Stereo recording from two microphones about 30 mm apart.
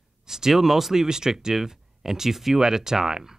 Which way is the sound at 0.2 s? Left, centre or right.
Centre.